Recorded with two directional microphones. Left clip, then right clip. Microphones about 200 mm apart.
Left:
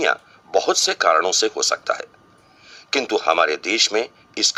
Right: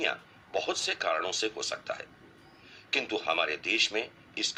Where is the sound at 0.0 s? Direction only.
45° left (ahead or behind).